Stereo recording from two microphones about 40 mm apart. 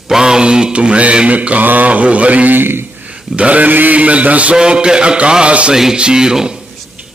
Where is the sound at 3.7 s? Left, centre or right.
Right.